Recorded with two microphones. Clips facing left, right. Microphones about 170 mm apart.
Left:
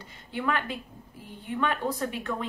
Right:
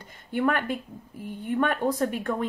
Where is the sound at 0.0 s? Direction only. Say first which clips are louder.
Right 6 dB; 50° right (ahead or behind).